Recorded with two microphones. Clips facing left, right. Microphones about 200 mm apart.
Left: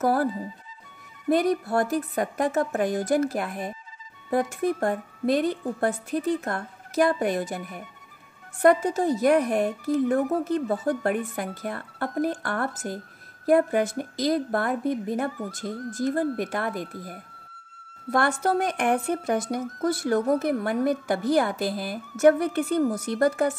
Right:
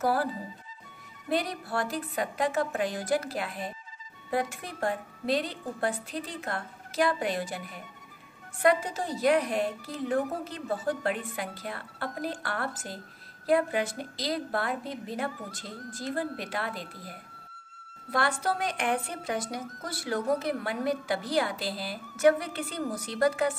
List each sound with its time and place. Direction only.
0.0 s speech: 50° left (ahead or behind)
1.3 s speech: 50° left (ahead or behind)